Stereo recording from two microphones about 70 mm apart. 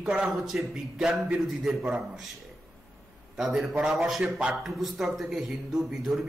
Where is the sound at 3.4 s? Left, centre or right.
Centre.